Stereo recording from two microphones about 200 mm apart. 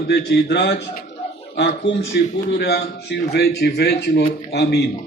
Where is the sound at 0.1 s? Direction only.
55° left (ahead or behind).